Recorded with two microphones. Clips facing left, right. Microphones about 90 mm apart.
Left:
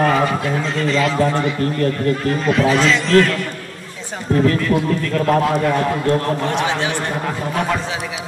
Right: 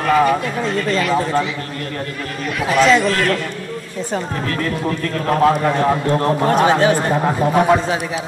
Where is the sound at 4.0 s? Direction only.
50° right (ahead or behind).